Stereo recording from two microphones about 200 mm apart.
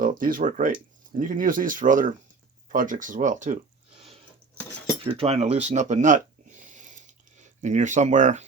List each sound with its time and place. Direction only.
0.0 s speech: 45° right (ahead or behind)
5.0 s speech: 30° right (ahead or behind)